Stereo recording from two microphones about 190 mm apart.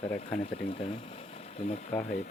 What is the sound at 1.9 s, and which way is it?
Speech, 5° left (ahead or behind).